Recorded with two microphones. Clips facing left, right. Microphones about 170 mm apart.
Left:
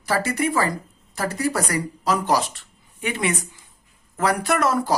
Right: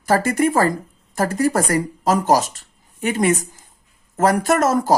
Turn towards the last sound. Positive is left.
turn(degrees=-45)  # may be behind; listen again after turning